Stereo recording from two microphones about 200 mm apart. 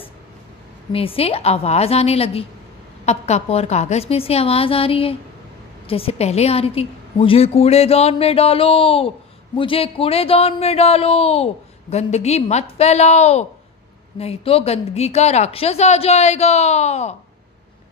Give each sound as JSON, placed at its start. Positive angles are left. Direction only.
{"t": 0.9, "sound": "a woman's voice", "side_deg": 30}